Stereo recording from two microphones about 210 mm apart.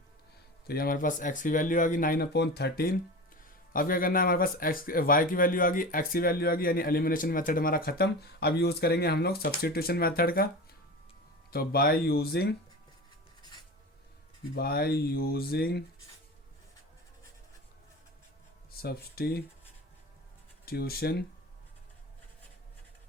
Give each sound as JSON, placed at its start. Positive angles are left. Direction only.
{"t": 0.7, "sound": "speech", "side_deg": 45}
{"t": 11.5, "sound": "speech", "side_deg": 45}
{"t": 14.5, "sound": "speech", "side_deg": 45}
{"t": 18.8, "sound": "speech", "side_deg": 45}
{"t": 20.7, "sound": "speech", "side_deg": 45}